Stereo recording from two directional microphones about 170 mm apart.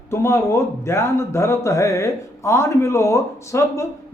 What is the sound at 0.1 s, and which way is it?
A man's voice, 15° left (ahead or behind).